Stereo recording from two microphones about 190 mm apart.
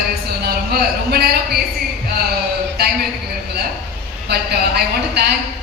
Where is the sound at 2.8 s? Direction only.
55° right (ahead or behind).